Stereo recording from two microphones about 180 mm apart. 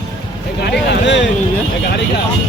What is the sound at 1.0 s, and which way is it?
Speech, 80° left.